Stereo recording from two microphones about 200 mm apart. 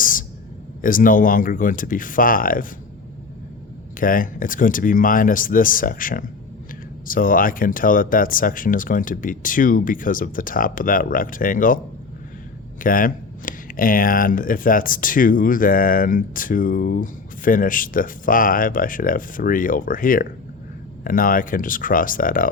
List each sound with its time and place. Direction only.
0.0 s a sound: 45° left (ahead or behind)
0.8 s speech: 45° left (ahead or behind)
4.0 s speech: 45° left (ahead or behind)
12.8 s speech: 45° left (ahead or behind)